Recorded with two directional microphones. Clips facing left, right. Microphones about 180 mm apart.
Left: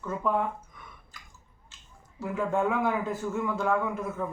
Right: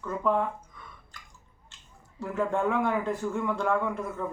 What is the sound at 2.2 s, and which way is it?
A man's voice, centre (ahead or behind).